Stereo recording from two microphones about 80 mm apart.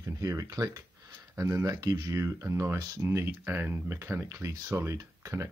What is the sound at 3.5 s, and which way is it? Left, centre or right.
Speech, right.